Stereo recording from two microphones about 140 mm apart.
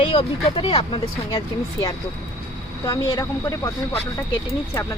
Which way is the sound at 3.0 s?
25° left (ahead or behind).